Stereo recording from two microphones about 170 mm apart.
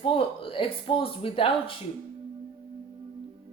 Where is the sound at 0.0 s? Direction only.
30° left (ahead or behind).